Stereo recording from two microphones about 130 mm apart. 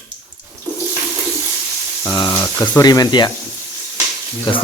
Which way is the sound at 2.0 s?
25° left (ahead or behind).